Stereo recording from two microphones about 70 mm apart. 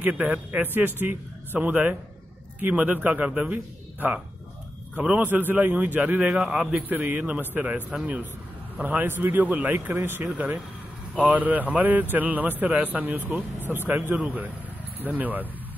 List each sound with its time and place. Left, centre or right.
0.0 s a man's voice: centre